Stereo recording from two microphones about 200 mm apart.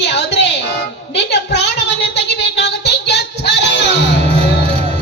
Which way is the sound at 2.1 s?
60° left (ahead or behind).